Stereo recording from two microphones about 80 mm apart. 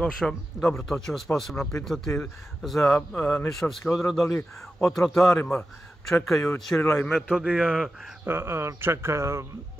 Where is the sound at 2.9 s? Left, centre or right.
Left.